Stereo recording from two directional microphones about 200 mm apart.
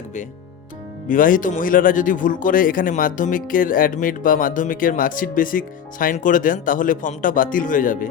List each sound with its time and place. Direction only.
1.0 s speech: 40° left (ahead or behind)